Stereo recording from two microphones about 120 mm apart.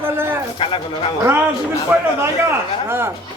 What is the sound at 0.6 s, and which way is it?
Speech, 45° left (ahead or behind).